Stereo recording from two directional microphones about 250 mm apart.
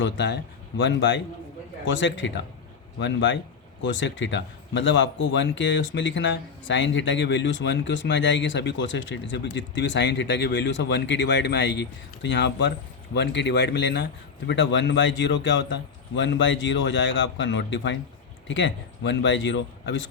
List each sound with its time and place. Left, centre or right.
0.8 s speech: left